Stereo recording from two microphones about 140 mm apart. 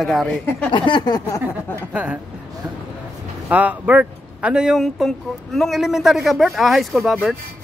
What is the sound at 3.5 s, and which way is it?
Speech, 10° right (ahead or behind).